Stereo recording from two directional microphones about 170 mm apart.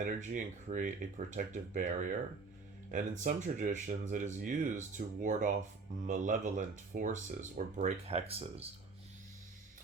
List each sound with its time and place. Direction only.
0.0 s speech: 45° right (ahead or behind)